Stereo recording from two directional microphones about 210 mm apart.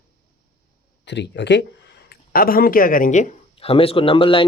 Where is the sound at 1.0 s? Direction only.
55° left (ahead or behind).